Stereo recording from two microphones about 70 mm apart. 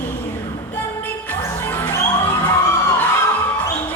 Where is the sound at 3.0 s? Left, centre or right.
Left.